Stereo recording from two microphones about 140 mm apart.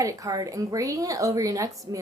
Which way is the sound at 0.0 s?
25° right (ahead or behind).